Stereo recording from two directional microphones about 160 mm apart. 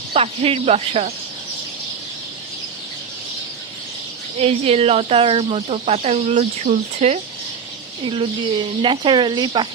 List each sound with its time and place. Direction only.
0.1 s speech: 40° right (ahead or behind)
4.4 s speech: 40° right (ahead or behind)
8.0 s speech: 30° right (ahead or behind)